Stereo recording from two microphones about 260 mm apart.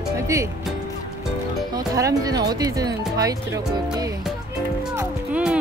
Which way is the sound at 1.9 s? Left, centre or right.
Centre.